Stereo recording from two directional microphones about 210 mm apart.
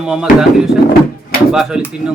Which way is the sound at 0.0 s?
5° right (ahead or behind).